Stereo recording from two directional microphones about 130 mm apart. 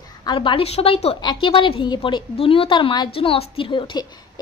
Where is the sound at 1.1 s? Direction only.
35° left (ahead or behind).